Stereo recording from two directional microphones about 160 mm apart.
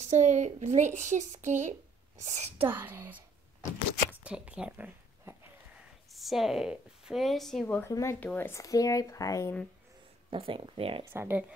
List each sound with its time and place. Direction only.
0.0 s a child's voice: 50° right (ahead or behind)
2.7 s a woman's voice: 10° right (ahead or behind); by 9.6 s 20° left (ahead or behind)
10.3 s speech: 35° right (ahead or behind)
11.1 s a woman's voice: 15° right (ahead or behind)